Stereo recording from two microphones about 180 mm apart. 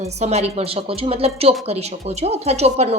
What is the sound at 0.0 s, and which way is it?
Speech, 35° right (ahead or behind).